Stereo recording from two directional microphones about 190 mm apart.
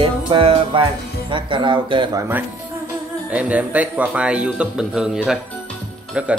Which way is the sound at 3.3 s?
5° right (ahead or behind).